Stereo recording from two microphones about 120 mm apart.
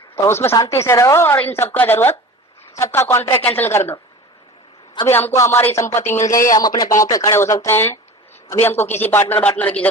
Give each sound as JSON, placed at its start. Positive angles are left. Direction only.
{"t": 0.3, "sound": "speech", "side_deg": 20}
{"t": 5.0, "sound": "speech", "side_deg": 20}